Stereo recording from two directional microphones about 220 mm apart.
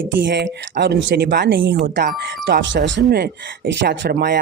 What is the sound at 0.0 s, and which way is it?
A man's voice, 55° right (ahead or behind).